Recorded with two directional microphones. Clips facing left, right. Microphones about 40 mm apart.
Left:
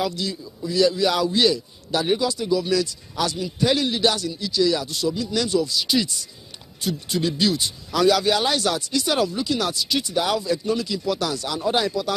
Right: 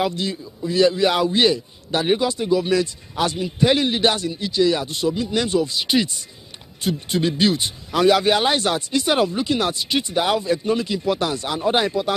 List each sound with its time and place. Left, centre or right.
0.0 s a man's voice: right